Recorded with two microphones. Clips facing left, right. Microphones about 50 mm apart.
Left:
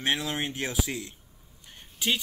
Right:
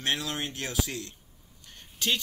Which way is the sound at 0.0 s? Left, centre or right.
Centre.